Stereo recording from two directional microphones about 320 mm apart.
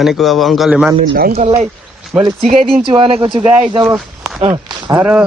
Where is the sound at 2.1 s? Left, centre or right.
Centre.